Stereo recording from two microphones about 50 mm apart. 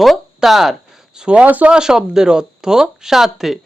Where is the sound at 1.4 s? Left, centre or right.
Right.